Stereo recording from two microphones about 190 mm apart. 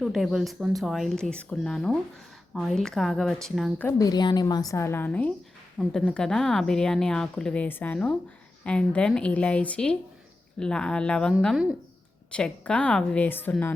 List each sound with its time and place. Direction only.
0.0 s speech: centre (ahead or behind)
3.8 s a woman's voice: 20° left (ahead or behind)